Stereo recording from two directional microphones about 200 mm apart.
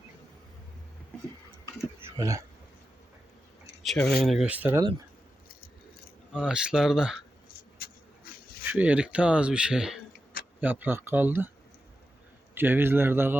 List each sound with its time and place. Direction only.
2.1 s speech: 15° right (ahead or behind)
3.8 s speech: 5° left (ahead or behind)
6.3 s speech: 5° right (ahead or behind)
8.6 s speech: 5° right (ahead or behind)
12.5 s speech: 10° right (ahead or behind)